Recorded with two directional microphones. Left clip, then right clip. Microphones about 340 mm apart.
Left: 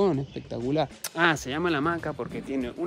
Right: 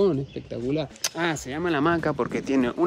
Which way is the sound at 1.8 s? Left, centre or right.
Right.